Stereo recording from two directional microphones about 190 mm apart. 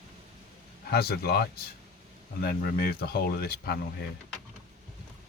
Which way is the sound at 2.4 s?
55° left (ahead or behind).